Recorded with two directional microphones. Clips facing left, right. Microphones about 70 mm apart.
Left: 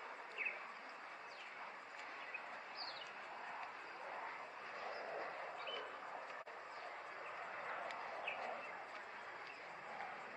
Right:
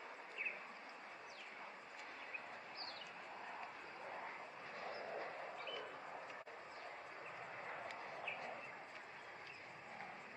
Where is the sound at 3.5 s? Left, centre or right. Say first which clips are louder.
Left 1 dB; centre.